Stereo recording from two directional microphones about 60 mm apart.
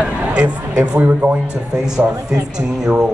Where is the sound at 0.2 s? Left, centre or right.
Right.